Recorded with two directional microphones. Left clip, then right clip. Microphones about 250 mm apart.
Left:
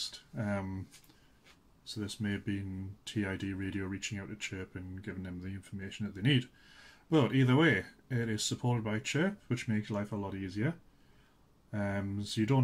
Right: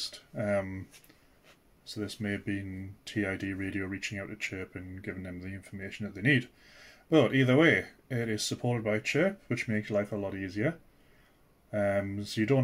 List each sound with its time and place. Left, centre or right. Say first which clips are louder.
0.0 s speech: right 5 dB; centre
1.9 s speech: right 3 dB; centre
11.7 s speech: right 8 dB; centre